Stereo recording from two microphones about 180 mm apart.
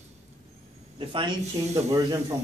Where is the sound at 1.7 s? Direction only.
15° right (ahead or behind).